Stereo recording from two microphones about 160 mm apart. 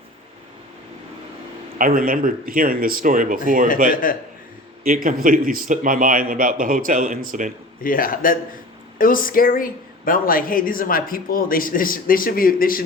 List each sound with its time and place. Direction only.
1.8 s speech: 60° right (ahead or behind)
3.9 s speech: 60° left (ahead or behind)
5.0 s speech: 60° right (ahead or behind)
7.9 s speech: 60° left (ahead or behind)